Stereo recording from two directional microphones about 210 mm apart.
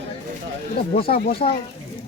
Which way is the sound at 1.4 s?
30° left (ahead or behind).